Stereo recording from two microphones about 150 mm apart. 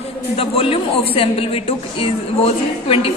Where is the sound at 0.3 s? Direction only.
40° left (ahead or behind).